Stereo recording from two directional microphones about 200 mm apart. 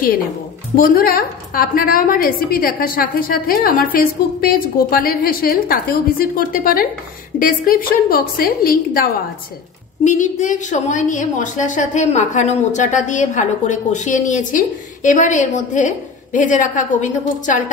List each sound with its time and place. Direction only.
0.7 s a woman's voice: 45° left (ahead or behind)
10.0 s a woman's voice: 40° left (ahead or behind)